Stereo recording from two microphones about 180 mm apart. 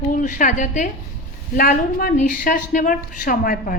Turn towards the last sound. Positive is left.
turn(degrees=50)  # may be behind; listen again after turning